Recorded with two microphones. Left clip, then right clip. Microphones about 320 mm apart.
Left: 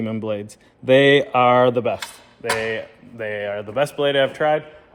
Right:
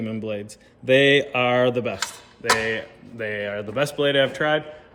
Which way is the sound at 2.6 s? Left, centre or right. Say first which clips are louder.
Left 1 dB; centre.